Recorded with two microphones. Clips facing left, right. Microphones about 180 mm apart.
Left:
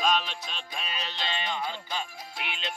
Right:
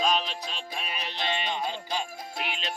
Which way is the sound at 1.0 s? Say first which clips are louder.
Right 4 dB; 20° right (ahead or behind).